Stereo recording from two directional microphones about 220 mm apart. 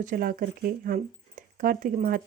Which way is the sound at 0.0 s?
40° right (ahead or behind).